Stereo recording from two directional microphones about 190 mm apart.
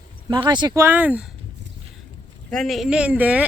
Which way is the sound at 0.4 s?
20° right (ahead or behind).